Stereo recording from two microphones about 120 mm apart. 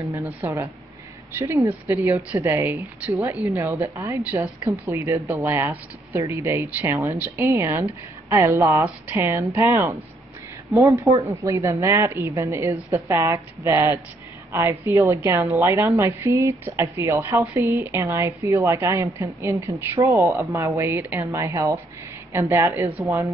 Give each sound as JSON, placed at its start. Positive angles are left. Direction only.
{"t": 0.1, "sound": "a woman's voice", "side_deg": -20}